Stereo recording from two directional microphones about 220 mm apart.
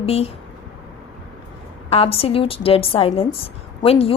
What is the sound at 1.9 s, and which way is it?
A woman's voice, 25° left (ahead or behind).